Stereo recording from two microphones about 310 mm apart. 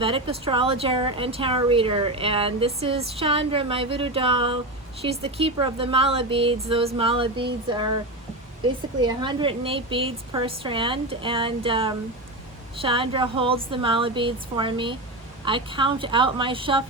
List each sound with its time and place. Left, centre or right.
0.0 s a woman's voice: centre